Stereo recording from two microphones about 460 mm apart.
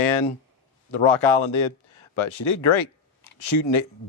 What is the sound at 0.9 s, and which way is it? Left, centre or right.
Speech, left.